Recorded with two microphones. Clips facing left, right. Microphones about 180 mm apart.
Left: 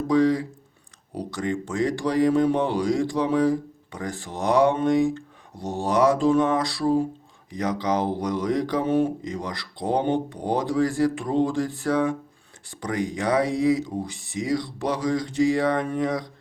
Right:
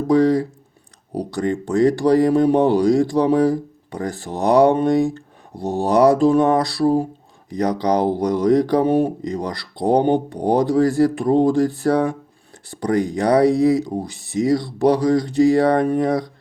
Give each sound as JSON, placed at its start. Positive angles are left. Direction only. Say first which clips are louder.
{"t": 0.1, "sound": "speech", "louder": "right 5 dB", "side_deg": -35}